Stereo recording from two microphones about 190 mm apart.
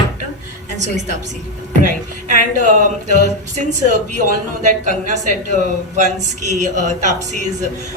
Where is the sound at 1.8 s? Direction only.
45° right (ahead or behind).